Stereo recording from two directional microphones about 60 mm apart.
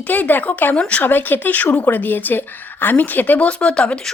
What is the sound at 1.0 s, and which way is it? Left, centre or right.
Speech, left.